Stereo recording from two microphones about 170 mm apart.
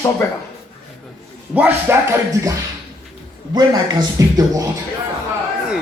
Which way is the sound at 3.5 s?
25° right (ahead or behind).